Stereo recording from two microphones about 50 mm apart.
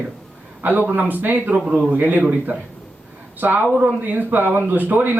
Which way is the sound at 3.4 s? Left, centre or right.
Right.